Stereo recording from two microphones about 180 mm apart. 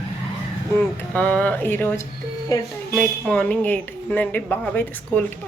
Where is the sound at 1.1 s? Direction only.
5° left (ahead or behind).